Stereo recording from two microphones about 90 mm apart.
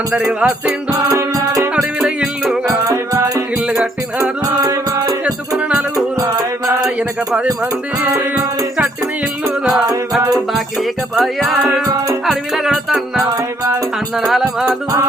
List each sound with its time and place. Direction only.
0.1 s music: 5° right (ahead or behind)
0.9 s music: 40° right (ahead or behind)
1.7 s music: 10° right (ahead or behind)
2.8 s music: 35° right (ahead or behind)
4.6 s music: 45° right (ahead or behind)
5.2 s music: 10° right (ahead or behind)
11.1 s music: centre (ahead or behind)
11.6 s music: 45° right (ahead or behind)
12.2 s music: 5° right (ahead or behind)